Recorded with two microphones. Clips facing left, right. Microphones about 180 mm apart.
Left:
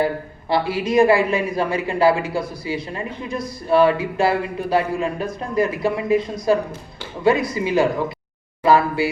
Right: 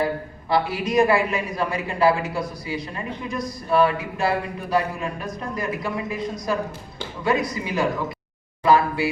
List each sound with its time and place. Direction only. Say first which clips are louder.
0.4 s speech: left 2 dB; 30° left (ahead or behind)